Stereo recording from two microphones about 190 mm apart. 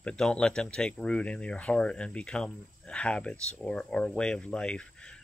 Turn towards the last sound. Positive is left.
turn(degrees=5)  # may be behind; listen again after turning